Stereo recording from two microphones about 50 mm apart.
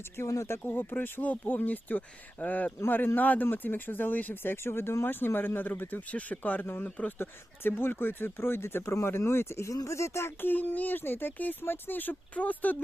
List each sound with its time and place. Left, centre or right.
0.2 s speech: left
0.6 s speech: left
4.5 s speech: left
5.0 s speech: left
6.8 s speech: left
7.8 s speech: left
10.4 s speech: left